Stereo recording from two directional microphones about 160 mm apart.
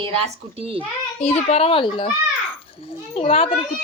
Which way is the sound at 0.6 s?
35° right (ahead or behind).